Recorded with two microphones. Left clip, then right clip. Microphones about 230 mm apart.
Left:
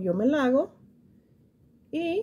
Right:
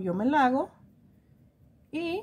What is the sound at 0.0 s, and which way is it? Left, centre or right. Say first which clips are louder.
Speech: even; centre.